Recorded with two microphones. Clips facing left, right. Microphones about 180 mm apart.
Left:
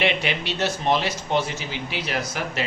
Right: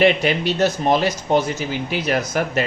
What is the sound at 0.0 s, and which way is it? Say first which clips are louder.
Speech: right 8 dB; 40° right (ahead or behind).